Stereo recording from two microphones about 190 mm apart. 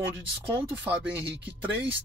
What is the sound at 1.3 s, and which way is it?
Speech, 65° right (ahead or behind).